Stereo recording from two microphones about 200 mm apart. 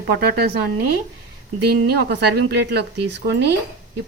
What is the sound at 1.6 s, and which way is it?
A woman's voice, 50° right (ahead or behind).